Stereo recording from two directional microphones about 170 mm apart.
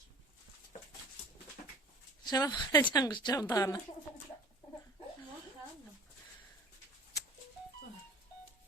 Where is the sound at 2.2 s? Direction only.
25° left (ahead or behind).